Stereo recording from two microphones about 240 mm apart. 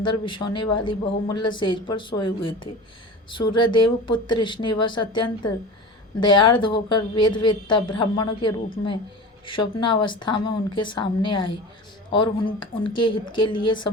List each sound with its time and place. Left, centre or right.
0.0 s speech: centre
9.8 s speech: centre